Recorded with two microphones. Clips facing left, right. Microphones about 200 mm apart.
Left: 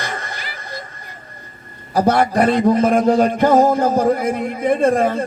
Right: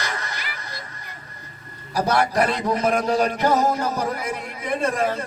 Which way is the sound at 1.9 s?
55° left (ahead or behind).